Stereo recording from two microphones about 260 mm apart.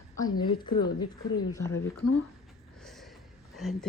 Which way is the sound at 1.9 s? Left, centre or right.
Left.